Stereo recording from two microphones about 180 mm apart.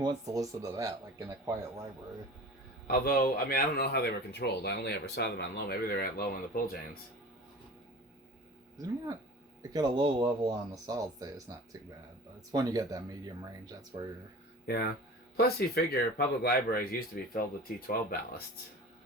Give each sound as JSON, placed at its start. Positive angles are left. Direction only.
{"t": 0.0, "sound": "speech", "side_deg": -20}
{"t": 2.8, "sound": "speech", "side_deg": 55}
{"t": 9.7, "sound": "speech", "side_deg": -25}
{"t": 14.7, "sound": "speech", "side_deg": 60}